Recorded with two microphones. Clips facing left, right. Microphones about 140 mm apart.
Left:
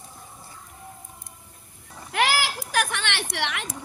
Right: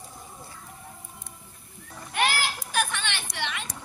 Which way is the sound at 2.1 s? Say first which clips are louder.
Left 3 dB; 90° left.